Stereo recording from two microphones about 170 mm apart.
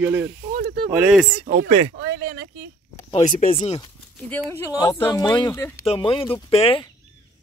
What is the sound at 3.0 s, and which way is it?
Speech, 35° left (ahead or behind).